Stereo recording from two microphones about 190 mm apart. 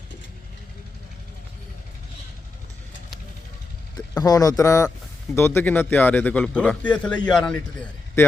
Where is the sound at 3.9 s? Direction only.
20° left (ahead or behind).